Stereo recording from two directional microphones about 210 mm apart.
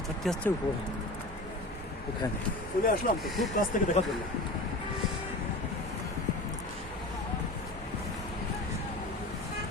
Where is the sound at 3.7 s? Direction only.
40° left (ahead or behind).